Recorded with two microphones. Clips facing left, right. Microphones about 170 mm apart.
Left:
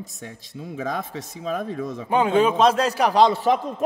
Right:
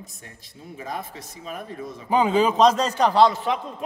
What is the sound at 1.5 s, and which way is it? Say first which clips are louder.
Speech: left 7 dB; 90° left.